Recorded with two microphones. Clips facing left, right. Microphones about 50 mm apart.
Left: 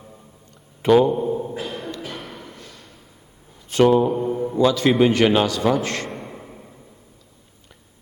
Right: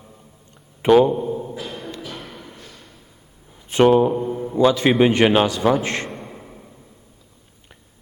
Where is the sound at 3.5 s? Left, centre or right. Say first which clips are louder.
Right 1 dB; centre.